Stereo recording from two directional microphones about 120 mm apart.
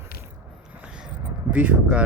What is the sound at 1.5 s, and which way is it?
Speech, 10° right (ahead or behind).